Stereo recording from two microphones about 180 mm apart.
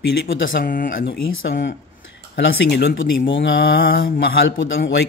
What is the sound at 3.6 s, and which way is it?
Speech, 75° left (ahead or behind).